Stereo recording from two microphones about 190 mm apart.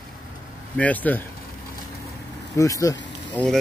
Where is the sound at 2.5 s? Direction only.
15° left (ahead or behind).